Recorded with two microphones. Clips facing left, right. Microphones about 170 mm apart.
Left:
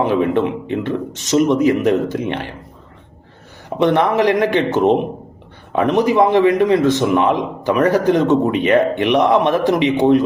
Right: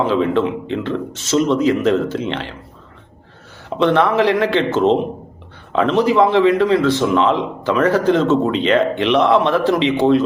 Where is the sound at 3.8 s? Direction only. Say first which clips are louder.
Even; 15° left (ahead or behind).